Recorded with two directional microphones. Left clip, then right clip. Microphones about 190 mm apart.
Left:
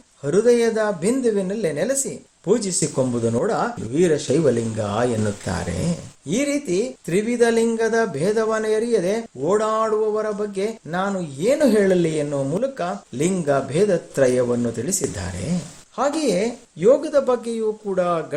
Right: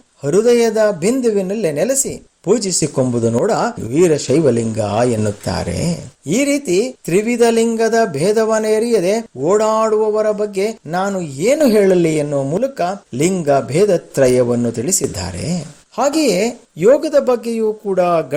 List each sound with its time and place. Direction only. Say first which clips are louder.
0.2 s a man's voice: right 4 dB; 30° right (ahead or behind)